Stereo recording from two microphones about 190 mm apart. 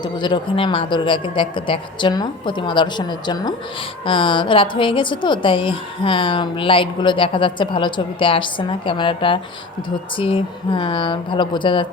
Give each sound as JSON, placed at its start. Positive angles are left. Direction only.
{"t": 0.0, "sound": "a woman's voice", "side_deg": 25}